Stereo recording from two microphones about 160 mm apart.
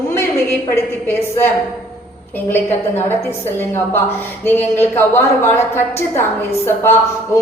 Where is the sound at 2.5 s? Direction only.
15° left (ahead or behind).